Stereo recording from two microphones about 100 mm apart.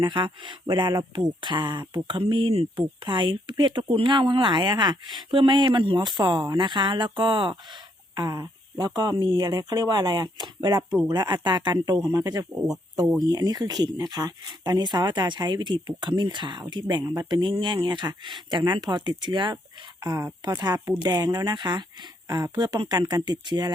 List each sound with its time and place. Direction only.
0.0 s speech: 50° right (ahead or behind)
2.0 s speech: 55° right (ahead or behind)
8.1 s speech: 40° right (ahead or behind)
20.1 s speech: 35° right (ahead or behind)